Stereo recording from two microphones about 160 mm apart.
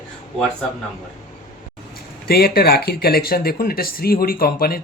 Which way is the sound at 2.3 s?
75° left (ahead or behind).